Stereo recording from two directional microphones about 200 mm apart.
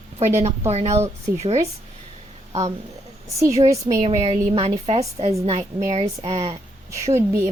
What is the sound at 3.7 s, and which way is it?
Speech, 15° right (ahead or behind).